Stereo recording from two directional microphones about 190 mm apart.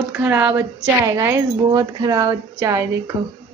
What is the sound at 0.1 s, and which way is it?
Speech, 10° right (ahead or behind).